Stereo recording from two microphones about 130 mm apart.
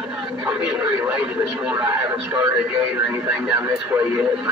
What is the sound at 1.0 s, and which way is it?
Speech, 10° right (ahead or behind).